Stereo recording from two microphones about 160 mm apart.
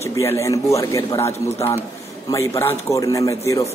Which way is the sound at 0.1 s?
20° left (ahead or behind).